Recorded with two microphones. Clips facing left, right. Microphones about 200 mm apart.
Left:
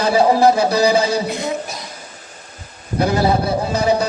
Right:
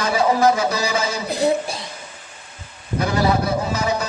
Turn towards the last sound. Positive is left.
turn(degrees=35)  # may be behind; listen again after turning